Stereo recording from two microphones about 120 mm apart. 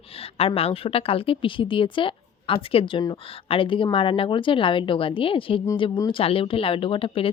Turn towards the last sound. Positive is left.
turn(degrees=50)  # may be behind; listen again after turning